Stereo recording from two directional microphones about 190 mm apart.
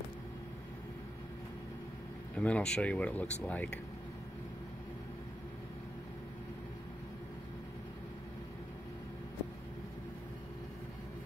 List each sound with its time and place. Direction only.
2.3 s speech: 5° left (ahead or behind)